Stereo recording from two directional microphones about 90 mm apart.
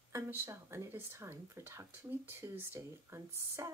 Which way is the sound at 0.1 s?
30° right (ahead or behind).